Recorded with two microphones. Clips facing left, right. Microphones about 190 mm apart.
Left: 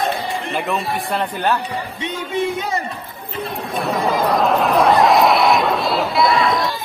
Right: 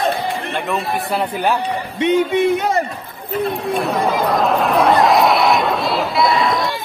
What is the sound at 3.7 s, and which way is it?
Speech, centre (ahead or behind).